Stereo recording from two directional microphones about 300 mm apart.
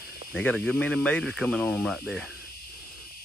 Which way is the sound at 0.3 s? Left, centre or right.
Centre.